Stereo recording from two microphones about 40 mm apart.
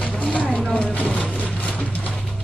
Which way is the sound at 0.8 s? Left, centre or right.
Left.